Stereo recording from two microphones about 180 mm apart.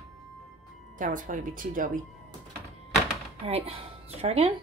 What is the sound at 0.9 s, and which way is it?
Speech, 45° right (ahead or behind).